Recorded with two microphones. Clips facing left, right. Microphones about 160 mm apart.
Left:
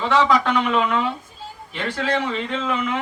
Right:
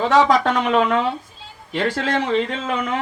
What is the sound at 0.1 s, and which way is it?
Speech, 40° right (ahead or behind).